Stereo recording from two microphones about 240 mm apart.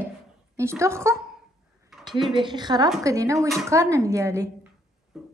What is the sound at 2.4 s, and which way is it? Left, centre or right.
A woman's voice, centre.